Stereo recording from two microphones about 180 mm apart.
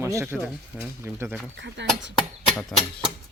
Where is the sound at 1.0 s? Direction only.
15° right (ahead or behind).